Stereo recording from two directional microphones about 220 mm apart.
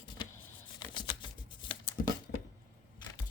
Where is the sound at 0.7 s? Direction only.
20° left (ahead or behind).